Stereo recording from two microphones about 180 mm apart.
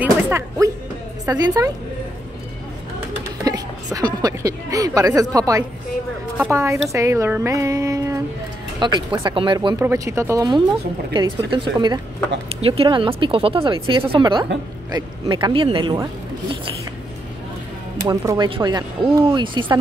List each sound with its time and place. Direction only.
0.0 s music: 15° right (ahead or behind)
1.2 s speech: 20° right (ahead or behind)
3.4 s a woman's voice: 20° right (ahead or behind)
9.1 s speech: 30° right (ahead or behind)
9.8 s speech: 15° right (ahead or behind)
18.0 s speech: 20° right (ahead or behind)